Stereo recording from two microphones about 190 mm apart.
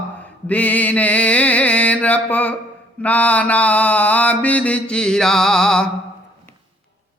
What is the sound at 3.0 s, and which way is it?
Mantra, 5° left (ahead or behind).